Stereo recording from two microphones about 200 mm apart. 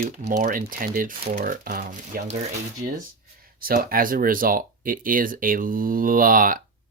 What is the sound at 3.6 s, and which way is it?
Speech, 45° right (ahead or behind).